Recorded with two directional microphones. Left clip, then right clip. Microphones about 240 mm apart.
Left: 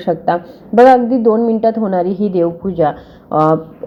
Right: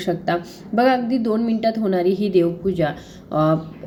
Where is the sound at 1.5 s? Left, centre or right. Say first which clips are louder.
Left 6 dB; centre.